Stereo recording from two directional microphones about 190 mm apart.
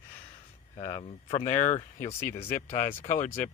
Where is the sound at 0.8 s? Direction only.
30° left (ahead or behind).